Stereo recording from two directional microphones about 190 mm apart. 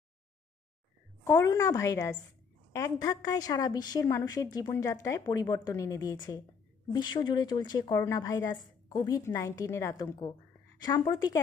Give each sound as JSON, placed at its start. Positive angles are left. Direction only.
{"t": 1.2, "sound": "a woman's voice", "side_deg": 15}